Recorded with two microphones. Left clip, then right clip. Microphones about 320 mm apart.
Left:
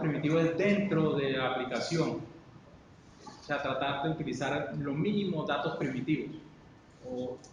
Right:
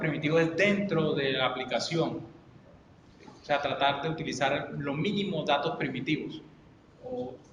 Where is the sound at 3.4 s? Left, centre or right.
Right.